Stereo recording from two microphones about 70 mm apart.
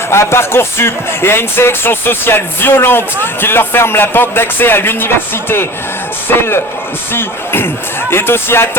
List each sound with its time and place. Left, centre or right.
0.1 s speech: left